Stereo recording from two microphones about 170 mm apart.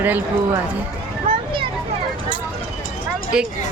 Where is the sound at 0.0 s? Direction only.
10° right (ahead or behind).